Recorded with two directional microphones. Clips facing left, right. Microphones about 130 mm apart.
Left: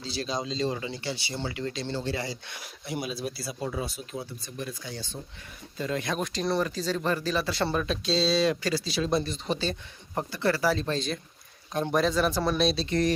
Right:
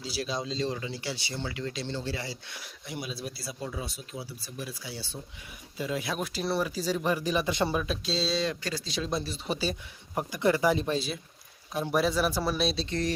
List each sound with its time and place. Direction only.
0.0 s speech: 10° right (ahead or behind)
1.9 s speech: 40° left (ahead or behind)
3.3 s speech: centre (ahead or behind)
8.4 s speech: 90° left
8.8 s speech: 5° left (ahead or behind)
12.9 s speech: 65° left (ahead or behind)